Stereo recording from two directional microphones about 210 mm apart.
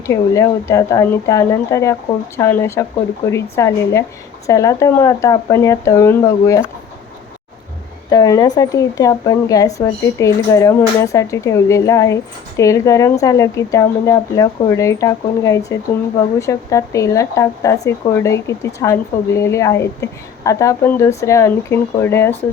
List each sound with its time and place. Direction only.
0.1 s speech: 15° left (ahead or behind)
8.1 s speech: 15° left (ahead or behind)